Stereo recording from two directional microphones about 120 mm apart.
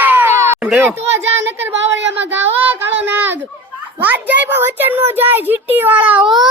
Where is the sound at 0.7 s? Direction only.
15° right (ahead or behind).